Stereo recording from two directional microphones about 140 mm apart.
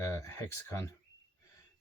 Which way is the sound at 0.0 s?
20° left (ahead or behind).